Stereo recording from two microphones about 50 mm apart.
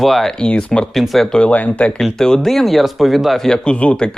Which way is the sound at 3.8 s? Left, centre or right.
Left.